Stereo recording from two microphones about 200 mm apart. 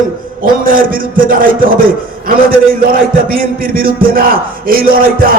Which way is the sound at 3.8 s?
45° right (ahead or behind).